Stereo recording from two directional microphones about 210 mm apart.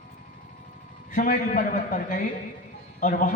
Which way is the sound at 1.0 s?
40° left (ahead or behind).